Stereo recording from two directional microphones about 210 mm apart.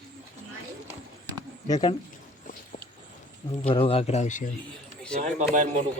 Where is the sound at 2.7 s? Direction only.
40° left (ahead or behind).